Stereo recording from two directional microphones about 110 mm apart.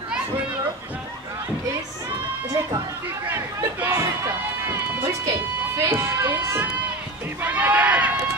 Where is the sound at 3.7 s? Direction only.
20° right (ahead or behind).